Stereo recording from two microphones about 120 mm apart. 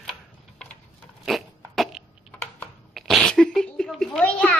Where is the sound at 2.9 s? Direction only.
Centre (ahead or behind).